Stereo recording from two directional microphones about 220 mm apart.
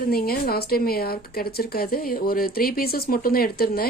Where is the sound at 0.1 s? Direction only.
45° left (ahead or behind).